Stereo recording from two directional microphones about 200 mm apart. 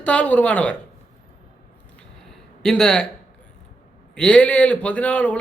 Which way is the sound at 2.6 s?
5° left (ahead or behind).